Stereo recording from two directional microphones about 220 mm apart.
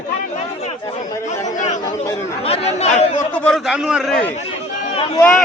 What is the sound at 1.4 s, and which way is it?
Chatter, 35° left (ahead or behind).